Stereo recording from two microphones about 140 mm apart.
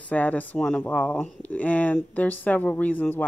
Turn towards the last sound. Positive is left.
turn(degrees=10)  # may be behind; listen again after turning